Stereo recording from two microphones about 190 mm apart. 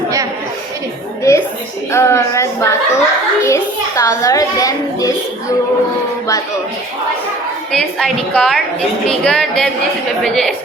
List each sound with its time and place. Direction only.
1.3 s a sound: 15° left (ahead or behind)
1.9 s a child's voice: 15° left (ahead or behind)
7.7 s a woman's voice: centre (ahead or behind)